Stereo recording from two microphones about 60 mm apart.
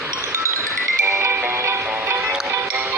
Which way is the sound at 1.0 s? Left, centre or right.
Right.